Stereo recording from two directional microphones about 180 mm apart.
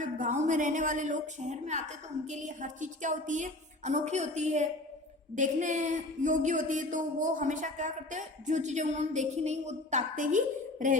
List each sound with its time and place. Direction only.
0.0 s speech: 45° right (ahead or behind)